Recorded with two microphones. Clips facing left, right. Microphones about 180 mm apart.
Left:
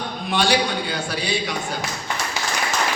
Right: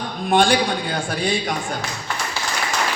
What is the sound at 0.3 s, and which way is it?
Speech, 50° right (ahead or behind).